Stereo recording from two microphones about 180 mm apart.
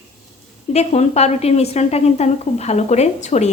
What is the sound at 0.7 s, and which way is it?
A woman's voice, 35° left (ahead or behind).